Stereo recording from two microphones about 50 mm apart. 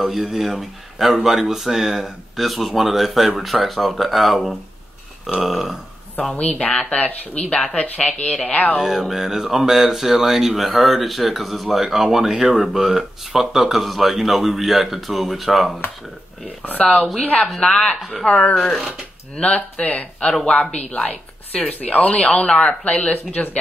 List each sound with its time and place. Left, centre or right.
0.0 s speech: centre
6.3 s a woman's voice: left
8.7 s music: centre
9.1 s speech: centre
16.6 s speech: left
17.6 s a woman's voice: centre
18.5 s speech: centre
19.3 s a woman's voice: left
23.1 s speech: left